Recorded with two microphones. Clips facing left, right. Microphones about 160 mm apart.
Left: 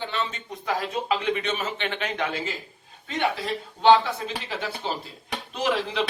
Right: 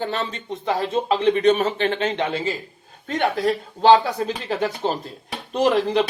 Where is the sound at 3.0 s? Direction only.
45° right (ahead or behind).